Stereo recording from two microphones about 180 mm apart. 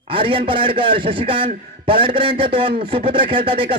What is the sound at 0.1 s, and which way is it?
A man's voice, 30° right (ahead or behind).